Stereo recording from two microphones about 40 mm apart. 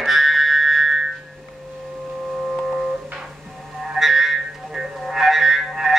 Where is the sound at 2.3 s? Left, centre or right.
Centre.